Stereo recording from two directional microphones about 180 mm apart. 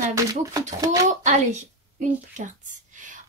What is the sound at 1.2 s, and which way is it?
A woman's voice, 40° right (ahead or behind).